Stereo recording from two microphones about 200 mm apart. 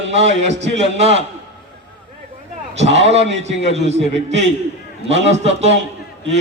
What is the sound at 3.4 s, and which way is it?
A man's voice, 35° right (ahead or behind).